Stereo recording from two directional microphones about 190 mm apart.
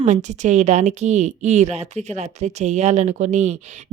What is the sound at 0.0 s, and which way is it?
Speech, 40° right (ahead or behind).